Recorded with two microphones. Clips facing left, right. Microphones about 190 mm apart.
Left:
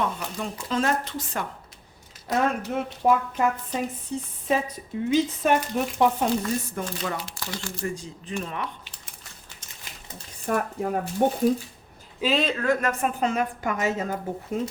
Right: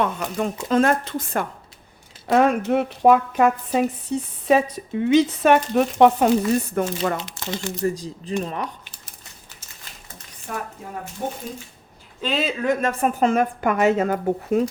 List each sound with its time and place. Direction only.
0.0 s a woman's voice: 60° right (ahead or behind)
2.2 s speech: 75° right (ahead or behind)
6.7 s a woman's voice: 55° right (ahead or behind)
7.2 s speech: 20° right (ahead or behind)
7.8 s speech: 35° right (ahead or behind)
8.4 s a sound: 40° right (ahead or behind)
10.5 s speech: 45° left (ahead or behind)
11.2 s speech: 65° left (ahead or behind)
12.2 s speech: centre (ahead or behind)
12.6 s speech: 20° right (ahead or behind)
13.0 s a woman's voice: 50° right (ahead or behind); by 14.6 s 65° right (ahead or behind)